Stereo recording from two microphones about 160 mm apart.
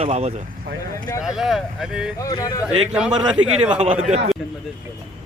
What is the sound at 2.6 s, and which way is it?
Speech, 5° right (ahead or behind).